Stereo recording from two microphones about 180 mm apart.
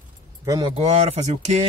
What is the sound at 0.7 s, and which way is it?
Speech, 35° right (ahead or behind).